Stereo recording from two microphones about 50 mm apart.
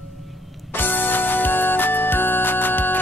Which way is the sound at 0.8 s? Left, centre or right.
Left.